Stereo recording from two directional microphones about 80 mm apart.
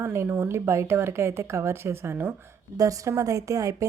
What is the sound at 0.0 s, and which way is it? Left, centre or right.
A woman's voice, right.